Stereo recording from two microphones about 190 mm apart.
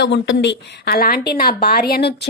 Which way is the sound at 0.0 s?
70° left (ahead or behind).